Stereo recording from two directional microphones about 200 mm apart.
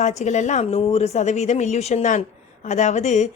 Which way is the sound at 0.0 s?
35° left (ahead or behind).